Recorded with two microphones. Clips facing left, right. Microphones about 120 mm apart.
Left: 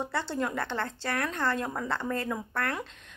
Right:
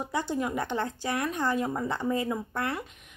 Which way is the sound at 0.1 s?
15° right (ahead or behind).